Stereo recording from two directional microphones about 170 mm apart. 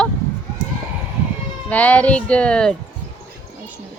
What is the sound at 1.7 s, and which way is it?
Speech, 10° left (ahead or behind).